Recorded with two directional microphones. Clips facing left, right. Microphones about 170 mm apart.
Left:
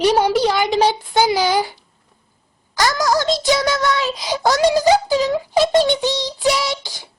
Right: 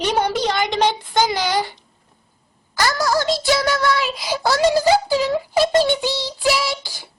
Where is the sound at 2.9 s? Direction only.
20° left (ahead or behind).